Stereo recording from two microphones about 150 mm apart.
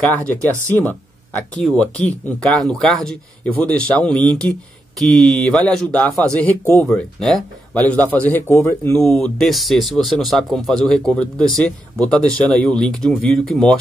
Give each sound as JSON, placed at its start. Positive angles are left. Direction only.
{"t": 0.7, "sound": "speech", "side_deg": 10}
{"t": 8.9, "sound": "speech", "side_deg": 5}